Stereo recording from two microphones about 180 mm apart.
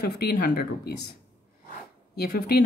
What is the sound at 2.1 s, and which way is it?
Speech, 60° left (ahead or behind).